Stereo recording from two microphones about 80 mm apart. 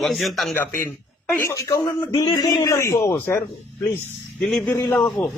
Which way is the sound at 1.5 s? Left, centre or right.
Left.